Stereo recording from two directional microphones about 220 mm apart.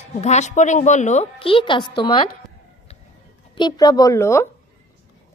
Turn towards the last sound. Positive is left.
turn(degrees=10)  # may be behind; listen again after turning